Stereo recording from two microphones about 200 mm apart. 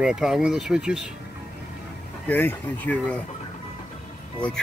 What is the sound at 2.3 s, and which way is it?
Speech, 10° left (ahead or behind).